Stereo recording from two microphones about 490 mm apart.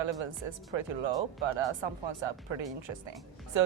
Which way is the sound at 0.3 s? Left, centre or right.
Right.